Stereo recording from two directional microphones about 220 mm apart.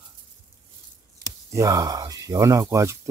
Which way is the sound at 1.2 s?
15° right (ahead or behind).